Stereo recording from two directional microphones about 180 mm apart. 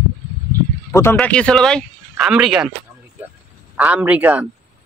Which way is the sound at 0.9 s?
15° left (ahead or behind).